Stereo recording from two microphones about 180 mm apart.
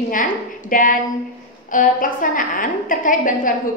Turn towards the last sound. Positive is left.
turn(degrees=50)  # may be behind; listen again after turning